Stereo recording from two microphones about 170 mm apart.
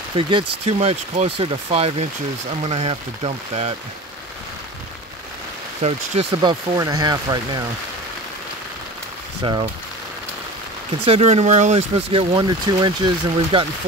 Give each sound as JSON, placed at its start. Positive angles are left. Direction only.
{"t": 0.1, "sound": "speech", "side_deg": -30}
{"t": 5.8, "sound": "speech", "side_deg": -35}
{"t": 9.4, "sound": "speech", "side_deg": -25}
{"t": 11.1, "sound": "speech", "side_deg": -35}